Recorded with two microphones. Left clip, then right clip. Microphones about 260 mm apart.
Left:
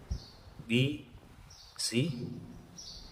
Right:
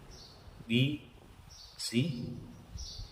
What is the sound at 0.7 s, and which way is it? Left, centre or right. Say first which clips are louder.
A man's voice: left 1 dB; centre.